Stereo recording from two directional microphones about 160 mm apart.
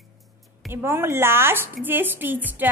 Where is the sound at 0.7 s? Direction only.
15° right (ahead or behind).